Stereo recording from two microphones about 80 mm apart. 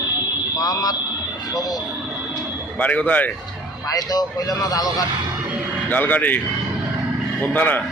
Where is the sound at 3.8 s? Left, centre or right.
Left.